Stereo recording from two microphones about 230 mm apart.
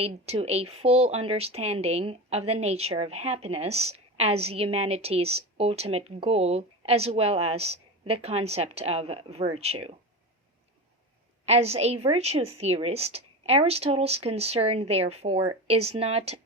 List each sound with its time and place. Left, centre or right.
0.0 s speech: right
11.4 s speech: right